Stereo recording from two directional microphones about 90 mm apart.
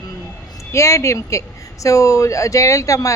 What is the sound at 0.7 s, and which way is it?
Speech, 30° left (ahead or behind).